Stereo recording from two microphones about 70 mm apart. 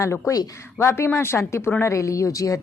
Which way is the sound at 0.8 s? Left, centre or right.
Left.